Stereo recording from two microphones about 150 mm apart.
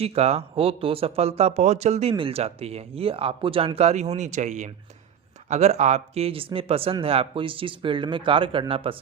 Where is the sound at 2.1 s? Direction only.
35° right (ahead or behind).